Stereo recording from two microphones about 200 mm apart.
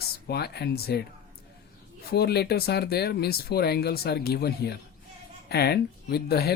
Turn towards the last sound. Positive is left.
turn(degrees=50)  # may be behind; listen again after turning